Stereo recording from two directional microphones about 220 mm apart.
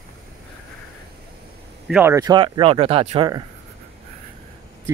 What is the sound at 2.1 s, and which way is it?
Speech, 20° right (ahead or behind).